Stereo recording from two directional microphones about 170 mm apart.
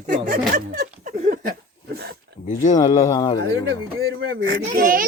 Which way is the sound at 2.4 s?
45° left (ahead or behind).